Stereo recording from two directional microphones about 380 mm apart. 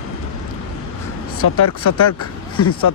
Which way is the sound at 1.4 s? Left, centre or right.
Left.